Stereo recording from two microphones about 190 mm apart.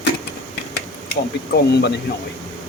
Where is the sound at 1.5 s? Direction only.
60° left (ahead or behind).